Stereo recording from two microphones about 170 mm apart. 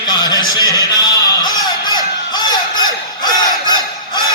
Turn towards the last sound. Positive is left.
turn(degrees=25)  # may be behind; listen again after turning